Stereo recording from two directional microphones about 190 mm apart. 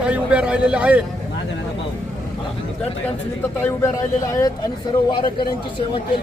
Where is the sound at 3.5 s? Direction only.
10° left (ahead or behind).